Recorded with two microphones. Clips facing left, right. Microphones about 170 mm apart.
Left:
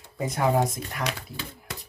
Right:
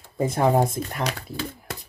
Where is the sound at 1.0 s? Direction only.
40° right (ahead or behind).